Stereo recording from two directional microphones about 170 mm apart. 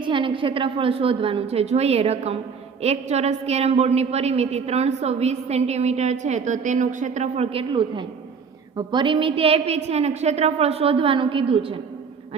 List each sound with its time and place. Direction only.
0.0 s a woman's voice: 30° right (ahead or behind)